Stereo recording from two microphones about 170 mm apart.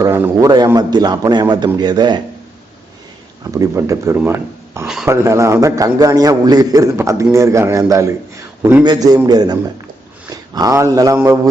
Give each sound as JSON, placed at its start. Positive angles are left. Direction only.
{"t": 0.0, "sound": "a man's voice", "side_deg": -15}
{"t": 3.5, "sound": "a man's voice", "side_deg": -20}